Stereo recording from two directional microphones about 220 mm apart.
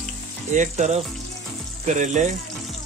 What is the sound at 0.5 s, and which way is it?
Speech, 35° right (ahead or behind).